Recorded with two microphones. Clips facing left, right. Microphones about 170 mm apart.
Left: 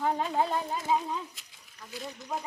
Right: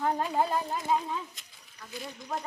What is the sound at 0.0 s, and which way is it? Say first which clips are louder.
Speech: even; centre (ahead or behind).